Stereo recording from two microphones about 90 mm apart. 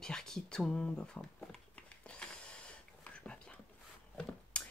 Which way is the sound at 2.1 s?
10° left (ahead or behind).